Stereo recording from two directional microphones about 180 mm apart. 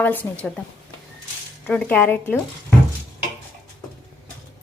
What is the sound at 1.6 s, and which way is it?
Speech, 10° left (ahead or behind).